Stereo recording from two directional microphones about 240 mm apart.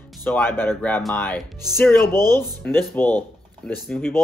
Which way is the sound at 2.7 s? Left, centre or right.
Centre.